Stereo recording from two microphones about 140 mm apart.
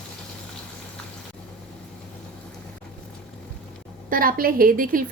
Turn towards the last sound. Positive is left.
turn(degrees=-85)